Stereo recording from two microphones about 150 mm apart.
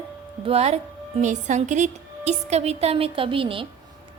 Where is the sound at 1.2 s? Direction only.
55° right (ahead or behind).